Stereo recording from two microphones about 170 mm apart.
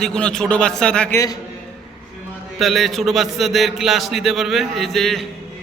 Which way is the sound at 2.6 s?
Centre (ahead or behind).